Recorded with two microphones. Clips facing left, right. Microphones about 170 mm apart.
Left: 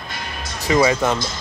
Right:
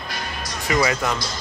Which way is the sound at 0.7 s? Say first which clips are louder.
Left 5 dB; 25° left (ahead or behind).